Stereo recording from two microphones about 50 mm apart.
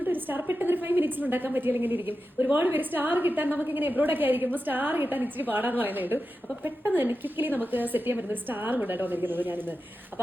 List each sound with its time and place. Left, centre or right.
0.0 s a woman's voice: right